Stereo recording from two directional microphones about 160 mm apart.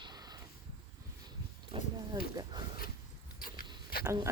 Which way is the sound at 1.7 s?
35° right (ahead or behind).